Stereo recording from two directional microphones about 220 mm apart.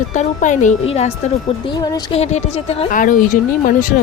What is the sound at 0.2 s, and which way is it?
Speech, 30° left (ahead or behind).